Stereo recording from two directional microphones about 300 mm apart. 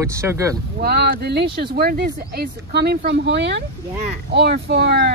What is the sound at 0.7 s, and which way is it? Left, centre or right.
Speech, right.